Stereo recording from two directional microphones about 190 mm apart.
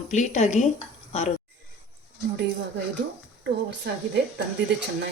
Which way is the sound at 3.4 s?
60° right (ahead or behind).